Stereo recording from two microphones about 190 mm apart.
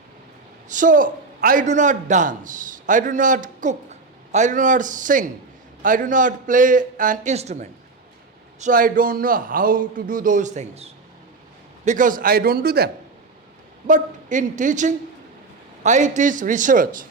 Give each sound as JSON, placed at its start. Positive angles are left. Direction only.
{"t": 0.7, "sound": "a man's voice", "side_deg": -45}
{"t": 13.8, "sound": "a man's voice", "side_deg": -40}